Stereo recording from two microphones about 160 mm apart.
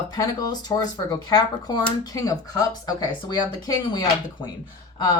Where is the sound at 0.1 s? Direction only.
25° left (ahead or behind).